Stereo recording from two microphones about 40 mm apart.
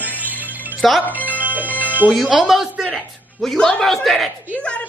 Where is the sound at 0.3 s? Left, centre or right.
Right.